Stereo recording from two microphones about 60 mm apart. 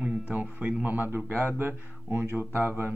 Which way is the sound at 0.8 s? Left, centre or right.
Right.